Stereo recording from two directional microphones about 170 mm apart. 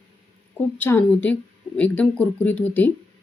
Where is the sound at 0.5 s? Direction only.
10° left (ahead or behind).